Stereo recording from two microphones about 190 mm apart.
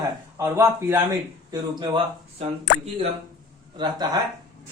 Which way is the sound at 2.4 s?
35° right (ahead or behind).